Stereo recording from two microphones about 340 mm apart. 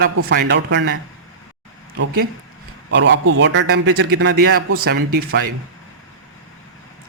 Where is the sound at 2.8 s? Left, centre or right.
Right.